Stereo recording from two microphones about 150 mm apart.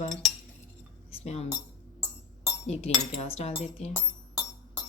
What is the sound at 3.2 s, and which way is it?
Speech, 45° left (ahead or behind).